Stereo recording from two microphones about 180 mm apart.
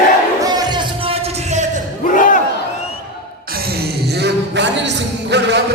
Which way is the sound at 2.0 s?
45° left (ahead or behind).